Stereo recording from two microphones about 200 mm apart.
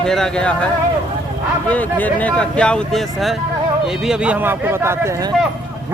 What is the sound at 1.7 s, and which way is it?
A man's voice, 10° left (ahead or behind).